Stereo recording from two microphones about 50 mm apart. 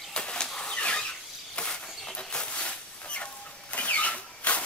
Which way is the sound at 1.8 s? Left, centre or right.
Centre.